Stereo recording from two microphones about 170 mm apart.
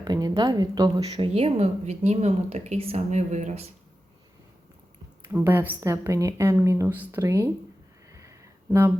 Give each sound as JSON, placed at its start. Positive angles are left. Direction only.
{"t": 0.0, "sound": "a woman's voice", "side_deg": -25}
{"t": 1.0, "sound": "a woman's voice", "side_deg": -40}
{"t": 5.3, "sound": "a woman's voice", "side_deg": -10}
{"t": 8.1, "sound": "a sound", "side_deg": -20}